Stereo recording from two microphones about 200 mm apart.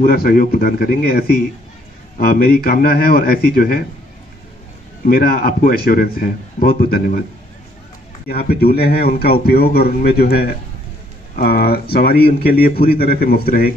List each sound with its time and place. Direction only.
0.0 s a man's voice: 50° left (ahead or behind)
5.0 s a man's voice: 45° left (ahead or behind)
8.3 s a man's voice: 50° left (ahead or behind)